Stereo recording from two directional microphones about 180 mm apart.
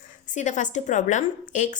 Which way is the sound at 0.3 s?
45° left (ahead or behind).